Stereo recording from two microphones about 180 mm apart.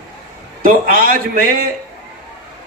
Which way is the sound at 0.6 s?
50° right (ahead or behind).